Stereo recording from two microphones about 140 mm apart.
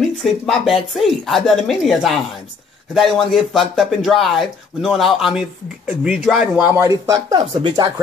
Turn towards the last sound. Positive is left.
turn(degrees=-35)  # may be behind; listen again after turning